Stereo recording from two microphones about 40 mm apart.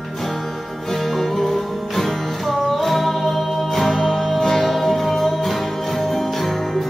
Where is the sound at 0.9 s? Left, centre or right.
Centre.